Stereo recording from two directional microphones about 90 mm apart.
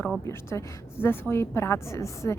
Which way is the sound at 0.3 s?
30° left (ahead or behind).